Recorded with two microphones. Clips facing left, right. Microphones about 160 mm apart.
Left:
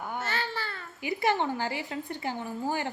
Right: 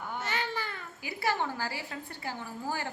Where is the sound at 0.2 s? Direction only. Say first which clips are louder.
Right 1 dB; 15° right (ahead or behind).